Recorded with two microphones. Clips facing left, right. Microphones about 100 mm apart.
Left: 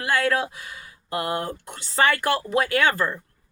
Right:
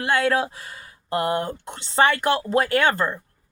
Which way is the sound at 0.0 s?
30° right (ahead or behind).